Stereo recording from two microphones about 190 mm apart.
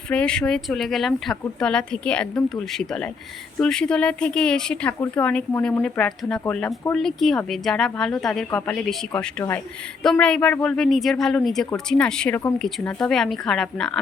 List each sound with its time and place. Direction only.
0.1 s speech: 5° left (ahead or behind)